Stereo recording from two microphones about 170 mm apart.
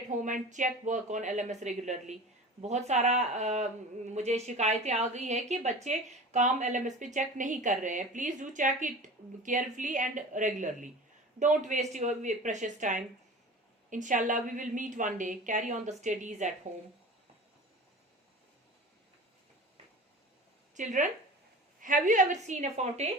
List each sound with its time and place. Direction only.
0.1 s a woman's voice: 50° right (ahead or behind)
20.7 s a woman's voice: 50° right (ahead or behind)